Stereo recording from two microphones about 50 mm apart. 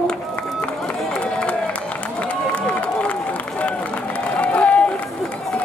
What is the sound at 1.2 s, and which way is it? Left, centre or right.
Run, left.